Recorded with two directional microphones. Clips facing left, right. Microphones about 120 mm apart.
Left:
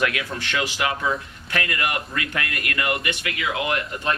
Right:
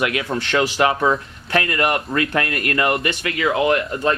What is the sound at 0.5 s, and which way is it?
Speech, 35° right (ahead or behind).